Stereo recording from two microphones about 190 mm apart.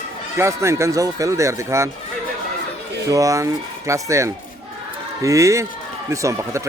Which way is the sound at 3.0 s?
15° right (ahead or behind).